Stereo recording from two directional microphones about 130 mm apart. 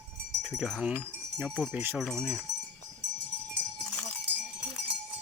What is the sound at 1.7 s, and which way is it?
Speech, 15° right (ahead or behind).